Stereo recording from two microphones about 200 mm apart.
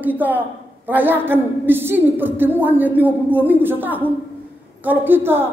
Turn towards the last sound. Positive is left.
turn(degrees=-10)  # may be behind; listen again after turning